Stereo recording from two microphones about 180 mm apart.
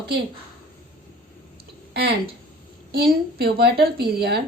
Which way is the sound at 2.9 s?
55° right (ahead or behind).